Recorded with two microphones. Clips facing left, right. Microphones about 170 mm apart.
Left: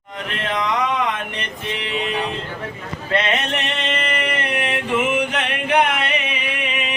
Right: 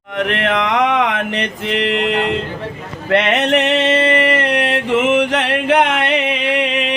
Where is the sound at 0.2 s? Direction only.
70° right (ahead or behind).